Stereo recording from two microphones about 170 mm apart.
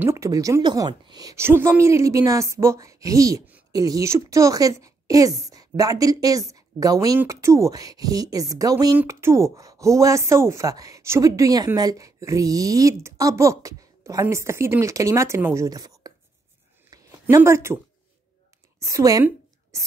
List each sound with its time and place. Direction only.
0.0 s speech: 15° right (ahead or behind)
16.9 s a sound: 15° right (ahead or behind)
18.8 s a woman's voice: 20° right (ahead or behind)